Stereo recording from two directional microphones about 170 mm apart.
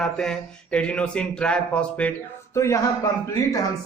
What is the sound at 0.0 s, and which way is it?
A man's voice, 5° left (ahead or behind).